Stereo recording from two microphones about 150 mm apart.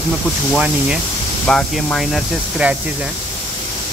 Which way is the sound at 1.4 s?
5° left (ahead or behind).